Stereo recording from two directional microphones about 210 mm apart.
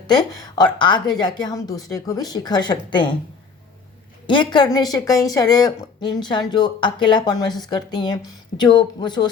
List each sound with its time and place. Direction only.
0.1 s a woman's voice: 20° left (ahead or behind)
4.3 s a woman's voice: 20° left (ahead or behind)